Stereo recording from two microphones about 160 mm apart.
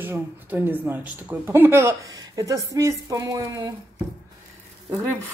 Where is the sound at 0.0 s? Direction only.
15° right (ahead or behind).